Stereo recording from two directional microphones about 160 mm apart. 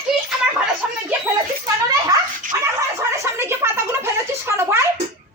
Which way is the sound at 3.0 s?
15° right (ahead or behind).